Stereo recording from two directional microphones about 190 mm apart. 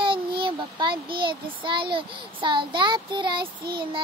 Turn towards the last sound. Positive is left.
turn(degrees=-25)  # may be behind; listen again after turning